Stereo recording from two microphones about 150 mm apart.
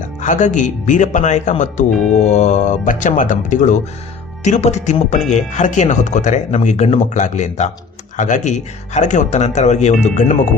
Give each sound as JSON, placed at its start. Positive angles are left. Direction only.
{"t": 0.2, "sound": "speech", "side_deg": 55}